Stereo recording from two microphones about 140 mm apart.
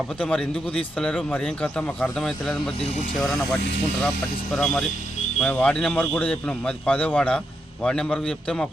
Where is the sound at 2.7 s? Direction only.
50° left (ahead or behind).